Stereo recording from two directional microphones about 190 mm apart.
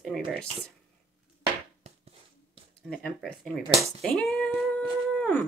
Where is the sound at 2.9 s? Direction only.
5° left (ahead or behind).